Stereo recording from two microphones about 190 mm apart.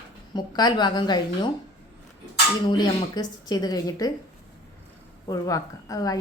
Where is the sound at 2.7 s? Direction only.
20° left (ahead or behind).